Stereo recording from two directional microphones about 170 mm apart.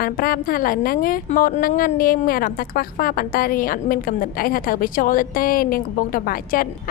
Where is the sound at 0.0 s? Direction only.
60° left (ahead or behind).